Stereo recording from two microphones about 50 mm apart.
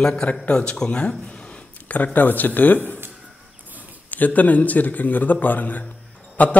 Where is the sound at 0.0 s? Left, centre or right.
Left.